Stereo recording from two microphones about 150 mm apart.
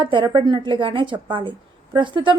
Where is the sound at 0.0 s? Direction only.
35° right (ahead or behind).